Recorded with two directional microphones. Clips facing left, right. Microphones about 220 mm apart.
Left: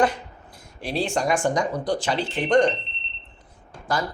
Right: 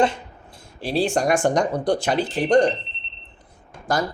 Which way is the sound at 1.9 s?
55° right (ahead or behind).